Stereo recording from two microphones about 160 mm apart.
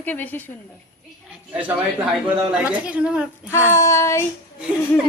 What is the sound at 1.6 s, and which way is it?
A woman's voice, 10° right (ahead or behind).